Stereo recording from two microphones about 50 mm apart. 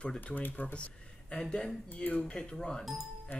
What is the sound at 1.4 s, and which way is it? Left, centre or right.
Speech, centre.